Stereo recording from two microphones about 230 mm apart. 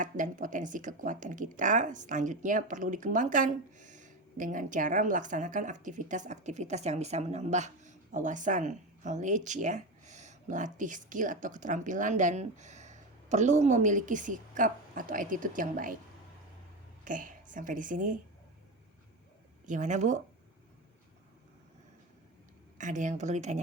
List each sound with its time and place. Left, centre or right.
0.0 s speech: right
17.0 s a woman's voice: right
19.6 s speech: right
22.8 s speech: right